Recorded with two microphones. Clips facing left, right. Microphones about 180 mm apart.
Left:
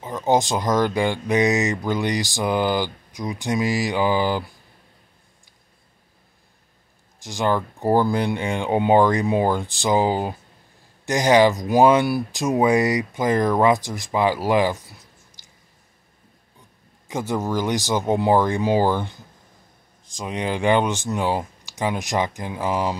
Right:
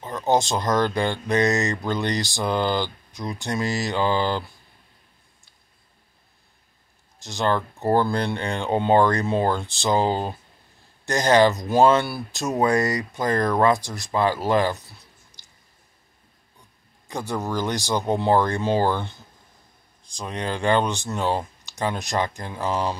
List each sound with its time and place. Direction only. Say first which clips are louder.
0.0 s speech: left 2 dB; 15° left (ahead or behind)
7.2 s speech: left 1 dB; 15° left (ahead or behind)
17.1 s speech: left 3 dB; 15° left (ahead or behind)